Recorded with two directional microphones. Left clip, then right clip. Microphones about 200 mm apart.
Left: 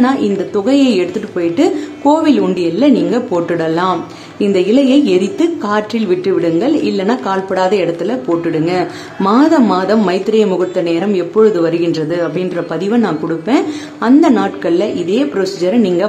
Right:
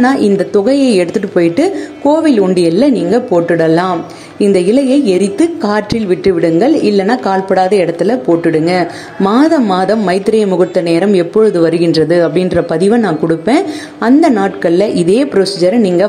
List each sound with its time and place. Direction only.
0.0 s speech: 15° right (ahead or behind)
9.2 s speech: centre (ahead or behind)
9.8 s speech: 15° right (ahead or behind)